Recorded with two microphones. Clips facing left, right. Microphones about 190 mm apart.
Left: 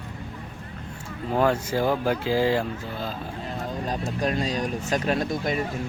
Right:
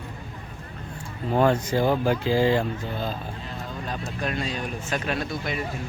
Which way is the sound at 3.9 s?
35° left (ahead or behind).